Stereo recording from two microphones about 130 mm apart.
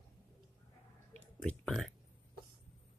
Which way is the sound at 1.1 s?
10° left (ahead or behind).